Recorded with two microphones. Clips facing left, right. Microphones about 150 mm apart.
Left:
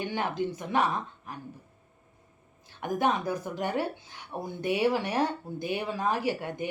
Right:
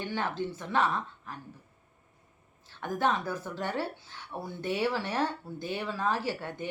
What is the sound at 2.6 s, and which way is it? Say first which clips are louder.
Speech: left 2 dB; 15° left (ahead or behind).